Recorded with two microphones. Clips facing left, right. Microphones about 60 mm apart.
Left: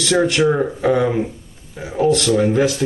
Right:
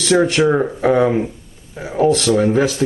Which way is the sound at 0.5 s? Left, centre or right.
Centre.